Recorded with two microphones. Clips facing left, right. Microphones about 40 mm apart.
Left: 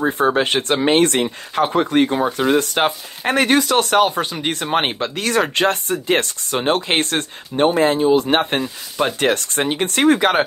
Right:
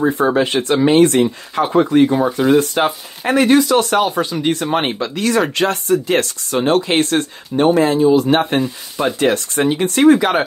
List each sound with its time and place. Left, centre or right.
0.1 s speech: left